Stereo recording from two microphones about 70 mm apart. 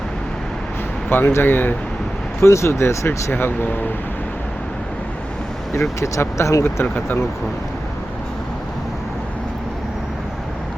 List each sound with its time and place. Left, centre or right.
1.1 s speech: left
2.4 s speech: left
3.1 s speech: left
5.7 s speech: left
6.8 s speech: left